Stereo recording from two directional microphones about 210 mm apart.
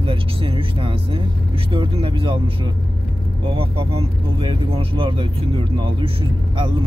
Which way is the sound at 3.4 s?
25° right (ahead or behind).